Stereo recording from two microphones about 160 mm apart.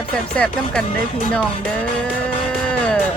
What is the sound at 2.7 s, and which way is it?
Music, 5° left (ahead or behind).